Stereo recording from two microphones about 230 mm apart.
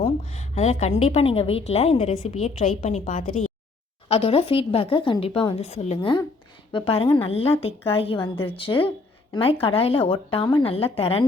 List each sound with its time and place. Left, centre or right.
0.0 s a woman's voice: left